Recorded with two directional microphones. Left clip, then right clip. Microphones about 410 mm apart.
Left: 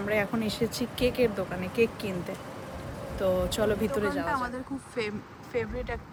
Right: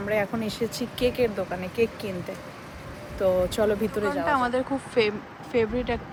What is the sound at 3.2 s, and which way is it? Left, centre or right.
Speech, centre.